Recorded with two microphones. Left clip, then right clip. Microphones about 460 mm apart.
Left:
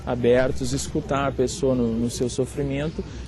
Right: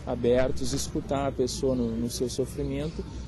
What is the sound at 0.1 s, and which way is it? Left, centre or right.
Speech, left.